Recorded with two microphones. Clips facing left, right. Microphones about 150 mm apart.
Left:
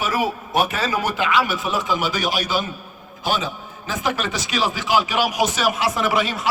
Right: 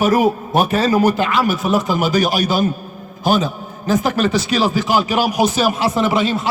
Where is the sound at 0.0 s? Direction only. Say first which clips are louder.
Right 8 dB; 45° right (ahead or behind).